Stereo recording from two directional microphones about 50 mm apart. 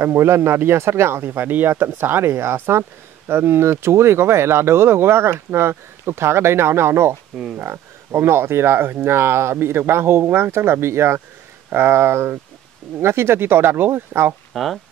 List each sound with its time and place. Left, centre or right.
0.0 s speech: right
14.5 s speech: centre